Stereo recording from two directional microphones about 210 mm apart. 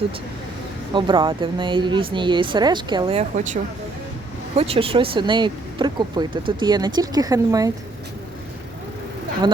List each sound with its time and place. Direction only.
0.9 s speech: 20° right (ahead or behind)